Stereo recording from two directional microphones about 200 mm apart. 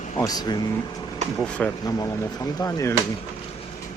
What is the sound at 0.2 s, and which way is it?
Speech, 20° left (ahead or behind).